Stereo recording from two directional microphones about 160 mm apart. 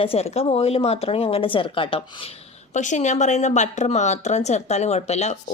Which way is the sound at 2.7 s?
50° left (ahead or behind).